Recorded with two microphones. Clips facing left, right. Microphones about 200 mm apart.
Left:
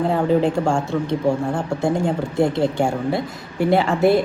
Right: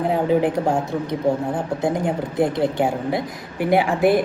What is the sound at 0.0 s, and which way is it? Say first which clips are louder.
A woman's voice: left 1 dB; 15° right (ahead or behind).